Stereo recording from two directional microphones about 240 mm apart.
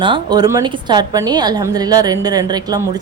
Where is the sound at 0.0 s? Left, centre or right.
Centre.